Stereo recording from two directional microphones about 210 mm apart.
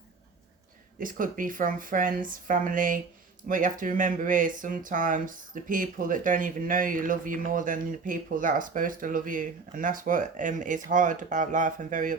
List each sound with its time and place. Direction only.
0.9 s speech: 40° right (ahead or behind)